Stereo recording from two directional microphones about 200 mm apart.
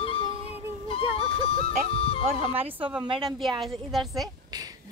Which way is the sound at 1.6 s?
30° left (ahead or behind).